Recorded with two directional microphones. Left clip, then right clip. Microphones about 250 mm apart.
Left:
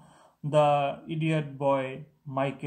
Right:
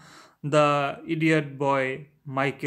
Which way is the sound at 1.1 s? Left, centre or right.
Right.